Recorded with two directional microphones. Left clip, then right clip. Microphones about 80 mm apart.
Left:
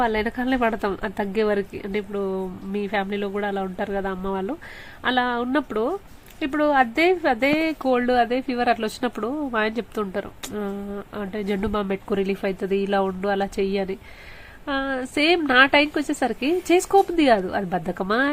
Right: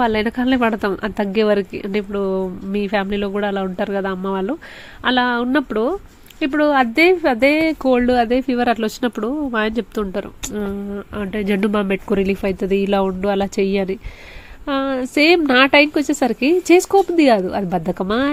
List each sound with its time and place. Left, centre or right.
0.0 s a woman's voice: right
11.6 s speech: right
11.9 s a woman's voice: right